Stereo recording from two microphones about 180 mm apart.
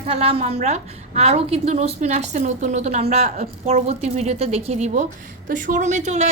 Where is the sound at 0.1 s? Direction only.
35° right (ahead or behind).